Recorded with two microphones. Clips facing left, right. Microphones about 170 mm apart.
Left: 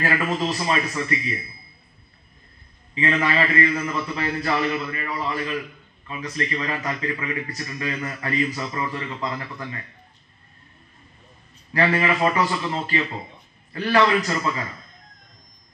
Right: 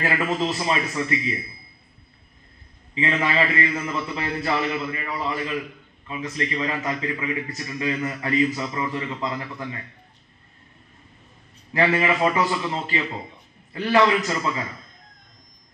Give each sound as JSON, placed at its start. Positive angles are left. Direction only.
{"t": 0.0, "sound": "a man's voice", "side_deg": -20}
{"t": 2.9, "sound": "a man's voice", "side_deg": -20}
{"t": 11.7, "sound": "a man's voice", "side_deg": -20}